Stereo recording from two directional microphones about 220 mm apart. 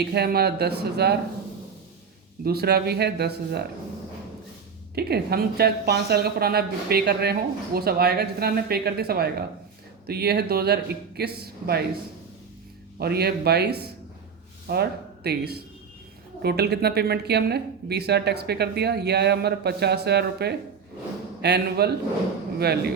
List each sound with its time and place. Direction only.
0.0 s a woman's voice: 45° right (ahead or behind)
2.4 s a woman's voice: 45° right (ahead or behind)
4.9 s a woman's voice: 45° right (ahead or behind)
13.0 s a woman's voice: 45° right (ahead or behind)